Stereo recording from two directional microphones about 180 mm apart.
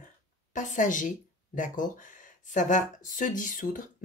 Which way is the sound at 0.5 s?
45° left (ahead or behind).